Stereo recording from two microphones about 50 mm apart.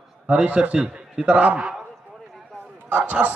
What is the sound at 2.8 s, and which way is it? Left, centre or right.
Speech, right.